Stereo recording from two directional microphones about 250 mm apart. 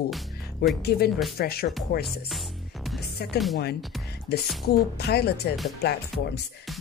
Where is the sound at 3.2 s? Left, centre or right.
Left.